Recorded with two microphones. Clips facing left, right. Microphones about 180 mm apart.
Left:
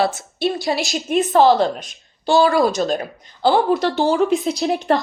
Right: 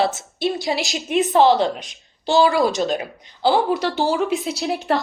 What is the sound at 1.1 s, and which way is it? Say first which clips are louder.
Speech: left 1 dB; 45° left (ahead or behind).